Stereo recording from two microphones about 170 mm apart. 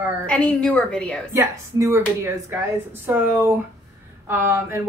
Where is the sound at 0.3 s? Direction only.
5° left (ahead or behind).